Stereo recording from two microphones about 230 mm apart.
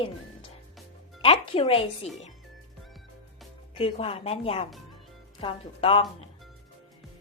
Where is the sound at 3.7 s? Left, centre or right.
Left.